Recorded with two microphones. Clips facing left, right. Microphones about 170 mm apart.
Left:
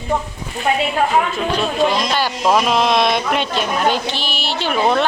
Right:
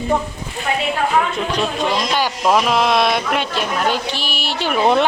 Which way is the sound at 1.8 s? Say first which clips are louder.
Left 4 dB; 15° right (ahead or behind).